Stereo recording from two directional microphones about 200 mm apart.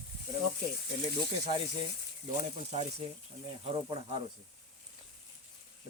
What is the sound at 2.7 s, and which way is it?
Speech, 35° right (ahead or behind).